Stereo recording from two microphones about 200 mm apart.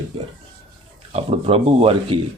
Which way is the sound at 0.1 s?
25° right (ahead or behind).